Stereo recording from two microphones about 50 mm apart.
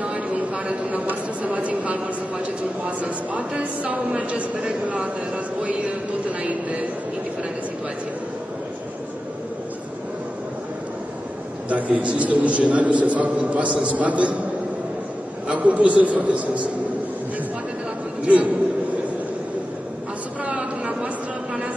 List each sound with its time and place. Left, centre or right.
0.0 s a sound: right
1.0 s a man's voice: right
11.7 s a man's voice: right
15.4 s a man's voice: right
18.2 s a man's voice: right
20.4 s a sound: right